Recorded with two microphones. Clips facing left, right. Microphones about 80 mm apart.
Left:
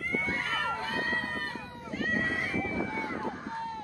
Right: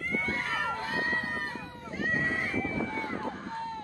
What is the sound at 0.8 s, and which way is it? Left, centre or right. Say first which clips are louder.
Run: right 1 dB; centre.